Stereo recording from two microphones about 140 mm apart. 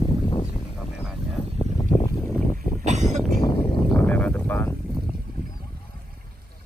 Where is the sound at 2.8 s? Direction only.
55° right (ahead or behind).